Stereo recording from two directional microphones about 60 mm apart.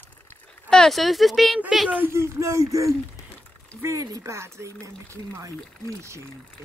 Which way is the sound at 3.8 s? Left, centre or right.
Right.